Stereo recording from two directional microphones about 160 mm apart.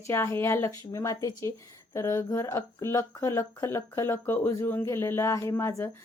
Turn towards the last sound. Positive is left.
turn(degrees=15)  # may be behind; listen again after turning